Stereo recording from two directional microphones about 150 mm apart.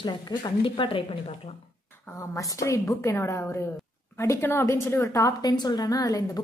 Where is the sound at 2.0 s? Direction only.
20° left (ahead or behind).